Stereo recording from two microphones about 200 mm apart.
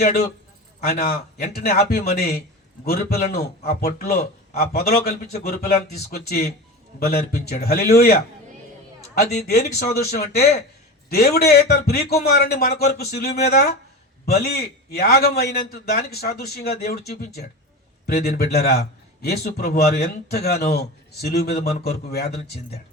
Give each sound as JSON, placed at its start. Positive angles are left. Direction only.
{"t": 0.8, "sound": "a man's voice", "side_deg": 50}
{"t": 18.0, "sound": "a man's voice", "side_deg": 50}